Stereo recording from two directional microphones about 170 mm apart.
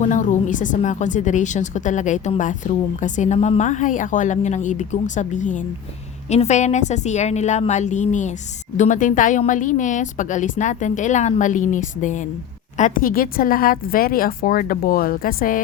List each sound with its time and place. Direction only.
0.0 s a woman's voice: 45° left (ahead or behind)